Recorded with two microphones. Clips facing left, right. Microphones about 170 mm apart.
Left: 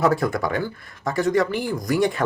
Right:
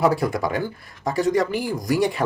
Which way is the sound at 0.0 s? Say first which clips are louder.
Even; 15° right (ahead or behind).